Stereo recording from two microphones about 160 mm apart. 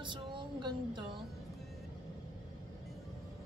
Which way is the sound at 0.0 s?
30° right (ahead or behind).